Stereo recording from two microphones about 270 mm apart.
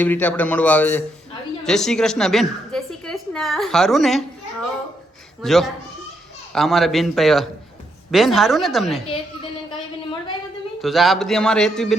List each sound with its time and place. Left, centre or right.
0.0 s a man's voice: centre
5.4 s a man's voice: centre
9.0 s a sound: centre
10.8 s a man's voice: centre